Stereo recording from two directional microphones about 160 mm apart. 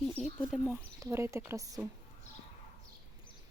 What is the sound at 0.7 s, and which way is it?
Speech, 20° right (ahead or behind).